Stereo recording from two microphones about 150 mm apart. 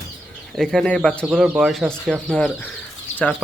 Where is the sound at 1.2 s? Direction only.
5° right (ahead or behind).